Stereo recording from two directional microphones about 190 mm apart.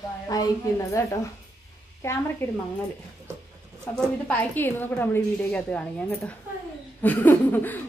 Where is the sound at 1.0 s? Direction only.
15° left (ahead or behind).